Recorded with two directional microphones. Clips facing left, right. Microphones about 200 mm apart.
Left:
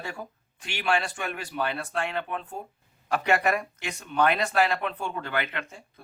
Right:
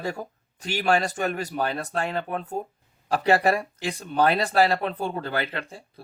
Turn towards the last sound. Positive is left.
turn(degrees=-35)  # may be behind; listen again after turning